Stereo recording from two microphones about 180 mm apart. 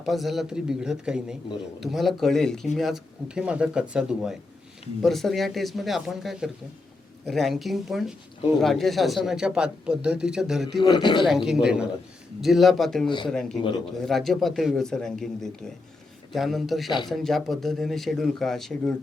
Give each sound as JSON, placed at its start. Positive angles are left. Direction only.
{"t": 0.0, "sound": "speech", "side_deg": 0}
{"t": 10.8, "sound": "speech", "side_deg": 25}
{"t": 11.3, "sound": "speech", "side_deg": 0}